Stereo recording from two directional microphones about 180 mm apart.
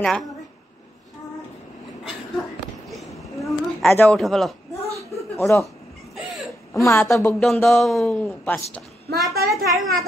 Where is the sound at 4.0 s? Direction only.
5° left (ahead or behind).